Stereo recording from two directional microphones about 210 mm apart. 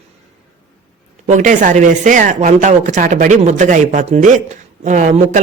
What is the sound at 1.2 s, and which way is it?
Speech, 35° right (ahead or behind).